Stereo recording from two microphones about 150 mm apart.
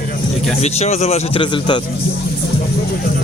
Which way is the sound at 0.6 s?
45° left (ahead or behind).